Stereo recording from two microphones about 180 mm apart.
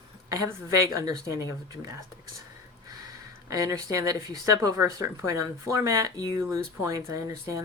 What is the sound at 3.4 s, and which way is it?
Speech, 20° right (ahead or behind).